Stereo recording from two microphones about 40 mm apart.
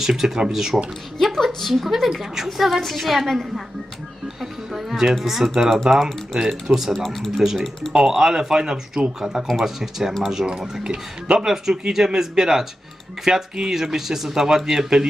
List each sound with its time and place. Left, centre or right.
0.0 s speech: centre
1.2 s a woman's voice: centre
7.4 s speech: centre